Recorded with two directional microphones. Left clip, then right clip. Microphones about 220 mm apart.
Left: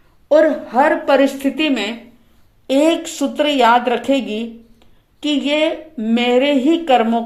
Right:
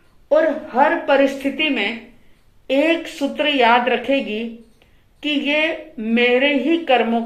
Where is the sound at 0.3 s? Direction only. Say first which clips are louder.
Left 4 dB; 50° left (ahead or behind).